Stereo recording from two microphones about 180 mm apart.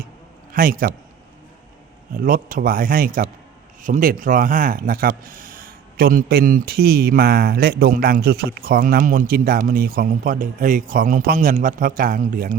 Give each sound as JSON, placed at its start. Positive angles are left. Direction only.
{"t": 0.5, "sound": "speech", "side_deg": -50}
{"t": 2.1, "sound": "speech", "side_deg": -50}